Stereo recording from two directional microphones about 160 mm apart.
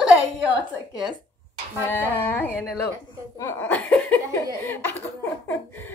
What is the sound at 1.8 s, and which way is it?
A woman's voice, 10° left (ahead or behind).